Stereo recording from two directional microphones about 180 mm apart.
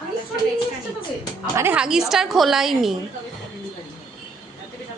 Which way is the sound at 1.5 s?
10° right (ahead or behind).